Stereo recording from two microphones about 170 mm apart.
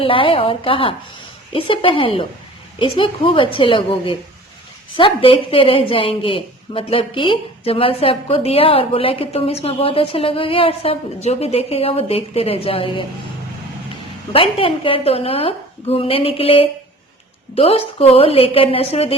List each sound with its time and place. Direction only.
0.0 s a woman's voice: 30° left (ahead or behind)
14.3 s speech: 30° left (ahead or behind)